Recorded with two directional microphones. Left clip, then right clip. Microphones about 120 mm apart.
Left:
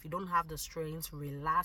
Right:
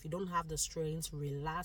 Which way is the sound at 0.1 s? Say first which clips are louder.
Left 4 dB; 25° right (ahead or behind).